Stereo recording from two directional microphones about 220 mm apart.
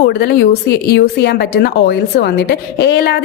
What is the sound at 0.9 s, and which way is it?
A woman's voice, 50° left (ahead or behind).